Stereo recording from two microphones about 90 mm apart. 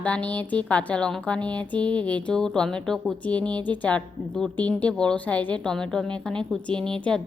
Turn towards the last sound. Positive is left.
turn(degrees=10)  # may be behind; listen again after turning